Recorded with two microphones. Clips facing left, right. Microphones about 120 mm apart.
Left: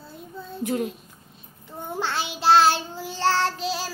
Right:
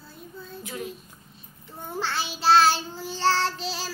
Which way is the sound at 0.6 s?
55° left (ahead or behind).